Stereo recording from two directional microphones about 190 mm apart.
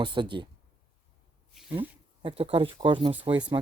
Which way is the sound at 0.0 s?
25° right (ahead or behind).